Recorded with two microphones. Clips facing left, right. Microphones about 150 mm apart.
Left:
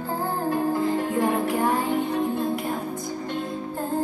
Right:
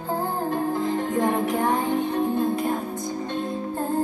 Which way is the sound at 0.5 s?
20° right (ahead or behind).